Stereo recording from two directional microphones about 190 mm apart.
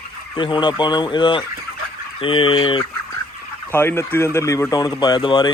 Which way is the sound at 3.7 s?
10° left (ahead or behind).